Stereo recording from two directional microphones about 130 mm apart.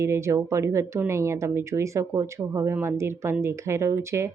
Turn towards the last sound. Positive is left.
turn(degrees=-20)  # may be behind; listen again after turning